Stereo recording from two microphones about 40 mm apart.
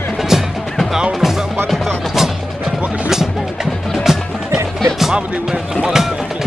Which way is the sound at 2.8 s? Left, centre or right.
Right.